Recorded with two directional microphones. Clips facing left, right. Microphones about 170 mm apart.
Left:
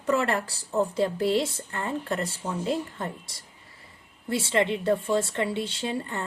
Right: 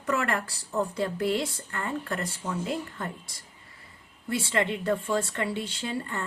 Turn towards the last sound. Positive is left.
turn(degrees=25)  # may be behind; listen again after turning